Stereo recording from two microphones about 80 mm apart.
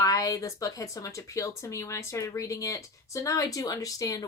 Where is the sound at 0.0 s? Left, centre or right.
Left.